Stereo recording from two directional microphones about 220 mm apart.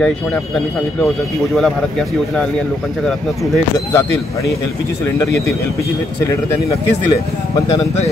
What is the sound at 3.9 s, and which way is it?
Speech, 15° left (ahead or behind).